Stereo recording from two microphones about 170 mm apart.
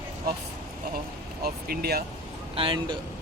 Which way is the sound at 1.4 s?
65° right (ahead or behind).